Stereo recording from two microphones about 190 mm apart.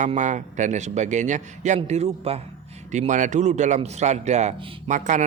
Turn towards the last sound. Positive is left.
turn(degrees=-40)  # may be behind; listen again after turning